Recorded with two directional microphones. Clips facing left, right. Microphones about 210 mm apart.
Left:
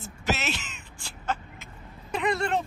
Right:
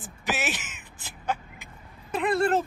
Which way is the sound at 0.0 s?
15° right (ahead or behind).